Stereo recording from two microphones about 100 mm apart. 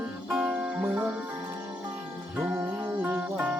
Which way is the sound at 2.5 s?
25° right (ahead or behind).